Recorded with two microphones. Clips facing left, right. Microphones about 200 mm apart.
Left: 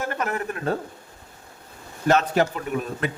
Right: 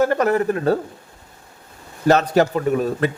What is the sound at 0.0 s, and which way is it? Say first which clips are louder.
Speech: right 10 dB; 40° right (ahead or behind).